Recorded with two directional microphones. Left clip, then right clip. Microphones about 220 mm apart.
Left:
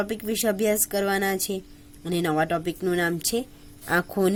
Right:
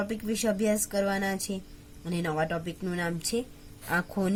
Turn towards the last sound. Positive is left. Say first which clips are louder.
# left 6 dB
turn(degrees=40)  # may be behind; listen again after turning